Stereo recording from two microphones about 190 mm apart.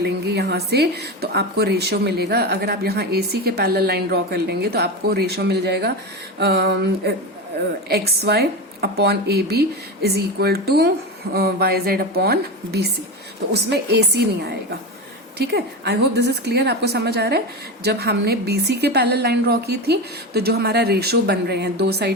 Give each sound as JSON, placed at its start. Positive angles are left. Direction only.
{"t": 0.0, "sound": "speech", "side_deg": -60}